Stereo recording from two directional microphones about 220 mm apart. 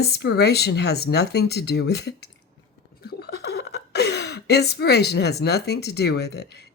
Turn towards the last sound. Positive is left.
turn(degrees=50)  # may be behind; listen again after turning